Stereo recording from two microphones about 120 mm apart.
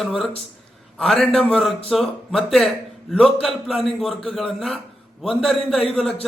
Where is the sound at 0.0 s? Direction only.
Centre (ahead or behind).